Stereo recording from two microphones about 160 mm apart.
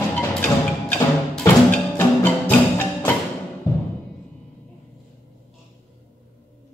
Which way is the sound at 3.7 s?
25° left (ahead or behind).